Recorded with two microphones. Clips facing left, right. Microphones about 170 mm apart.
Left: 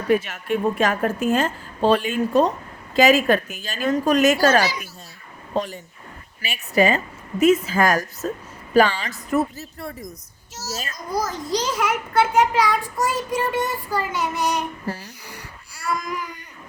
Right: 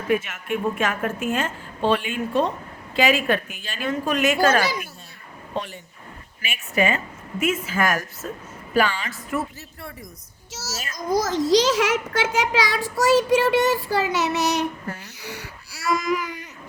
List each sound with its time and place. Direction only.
0.1 s a woman's voice: 35° left (ahead or behind)
4.6 s speech: 55° right (ahead or behind)
5.5 s a woman's voice: 40° left (ahead or behind)
10.9 s a child's voice: 90° right
14.8 s a woman's voice: 35° left (ahead or behind)
15.2 s speech: 75° right (ahead or behind); by 16.4 s 90° right